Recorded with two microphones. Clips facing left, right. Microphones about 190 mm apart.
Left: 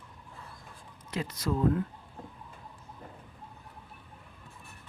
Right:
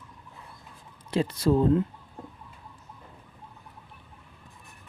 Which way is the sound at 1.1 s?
30° right (ahead or behind).